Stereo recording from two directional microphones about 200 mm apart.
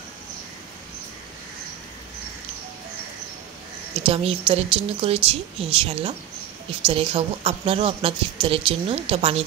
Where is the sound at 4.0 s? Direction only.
30° right (ahead or behind).